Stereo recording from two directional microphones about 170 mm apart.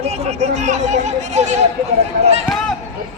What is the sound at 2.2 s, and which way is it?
Run, 40° right (ahead or behind).